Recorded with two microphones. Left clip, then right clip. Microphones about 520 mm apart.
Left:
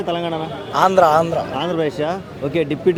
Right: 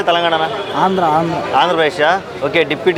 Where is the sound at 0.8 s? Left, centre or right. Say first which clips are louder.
Left 1 dB; left.